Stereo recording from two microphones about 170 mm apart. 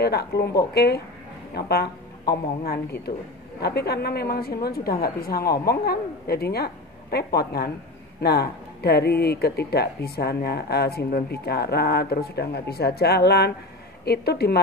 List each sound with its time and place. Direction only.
0.0 s a woman's voice: 70° left (ahead or behind)